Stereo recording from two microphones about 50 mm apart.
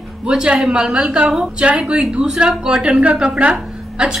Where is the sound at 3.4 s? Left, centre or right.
Right.